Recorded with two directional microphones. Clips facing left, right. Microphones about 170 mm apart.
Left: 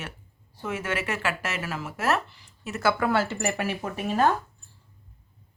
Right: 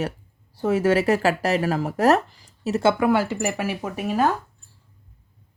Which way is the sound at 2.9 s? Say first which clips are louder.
Right 5 dB; 15° right (ahead or behind).